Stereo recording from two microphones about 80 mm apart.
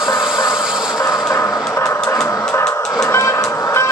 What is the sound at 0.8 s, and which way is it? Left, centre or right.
Music, left.